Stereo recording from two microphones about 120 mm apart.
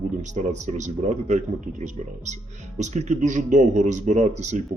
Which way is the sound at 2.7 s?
75° right (ahead or behind).